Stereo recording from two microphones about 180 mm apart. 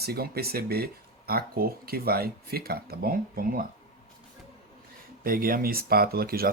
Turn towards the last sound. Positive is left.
turn(degrees=-55)  # may be behind; listen again after turning